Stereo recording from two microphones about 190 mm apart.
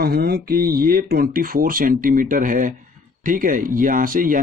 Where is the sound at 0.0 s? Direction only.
55° right (ahead or behind).